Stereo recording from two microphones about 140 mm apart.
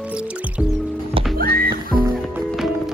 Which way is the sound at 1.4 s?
90° right.